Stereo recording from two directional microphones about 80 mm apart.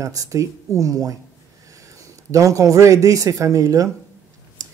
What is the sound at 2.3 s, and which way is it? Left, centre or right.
Speech, right.